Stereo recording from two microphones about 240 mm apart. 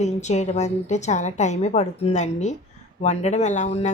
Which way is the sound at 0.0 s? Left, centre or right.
Left.